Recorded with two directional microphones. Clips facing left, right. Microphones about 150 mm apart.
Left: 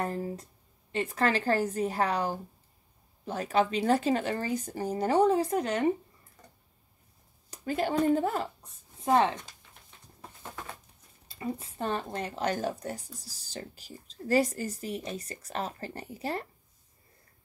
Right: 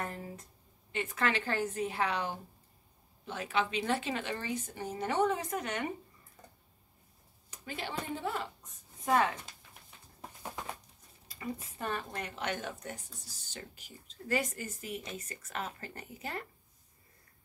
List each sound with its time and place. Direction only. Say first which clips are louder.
0.0 s speech: left 8 dB; 35° left (ahead or behind)
7.5 s speech: left 11 dB; 40° left (ahead or behind)
9.0 s speech: left 4 dB; 30° left (ahead or behind)
11.2 s speech: left 5 dB; 25° left (ahead or behind)